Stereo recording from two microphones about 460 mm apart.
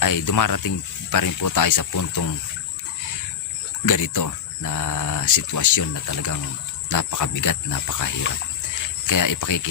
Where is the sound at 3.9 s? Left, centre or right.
Left.